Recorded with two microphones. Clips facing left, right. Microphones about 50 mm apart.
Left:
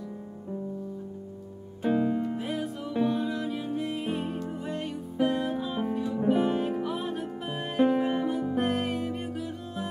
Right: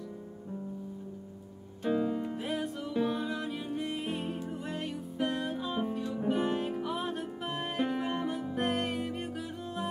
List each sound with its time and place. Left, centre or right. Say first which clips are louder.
1.8 s music: left 4 dB; centre
2.2 s music: left 3 dB; centre